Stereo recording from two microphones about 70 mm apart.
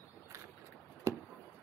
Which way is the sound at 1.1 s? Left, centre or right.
Right.